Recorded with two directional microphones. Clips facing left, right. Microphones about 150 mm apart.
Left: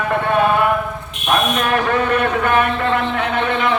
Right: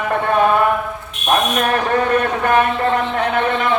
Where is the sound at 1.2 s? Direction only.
40° right (ahead or behind).